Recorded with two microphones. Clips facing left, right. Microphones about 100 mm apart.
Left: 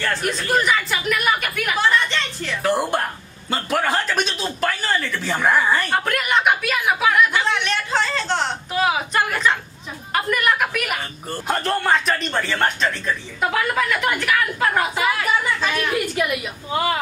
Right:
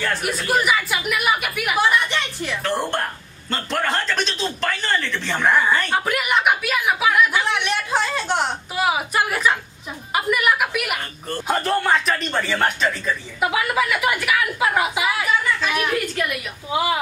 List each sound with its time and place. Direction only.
0.0 s speech: 5° right (ahead or behind)
2.6 s music: 5° left (ahead or behind)
3.4 s a sound: 10° left (ahead or behind)
11.2 s a man's voice: 5° left (ahead or behind)
16.7 s speech: 5° right (ahead or behind)